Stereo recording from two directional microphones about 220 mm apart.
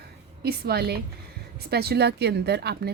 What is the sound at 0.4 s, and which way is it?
A woman's voice, 45° right (ahead or behind).